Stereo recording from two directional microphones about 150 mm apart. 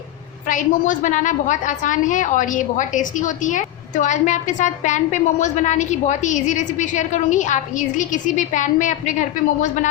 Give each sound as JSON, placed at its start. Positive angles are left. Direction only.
{"t": 0.4, "sound": "a woman's voice", "side_deg": 60}